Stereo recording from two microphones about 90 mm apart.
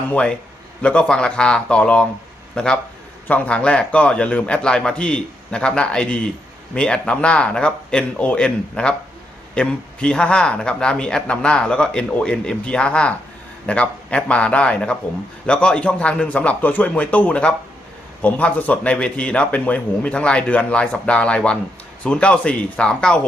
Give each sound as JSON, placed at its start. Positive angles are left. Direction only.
{"t": 0.1, "sound": "speech", "side_deg": 10}